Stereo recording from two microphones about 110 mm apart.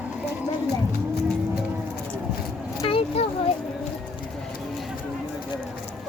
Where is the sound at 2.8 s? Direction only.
60° left (ahead or behind).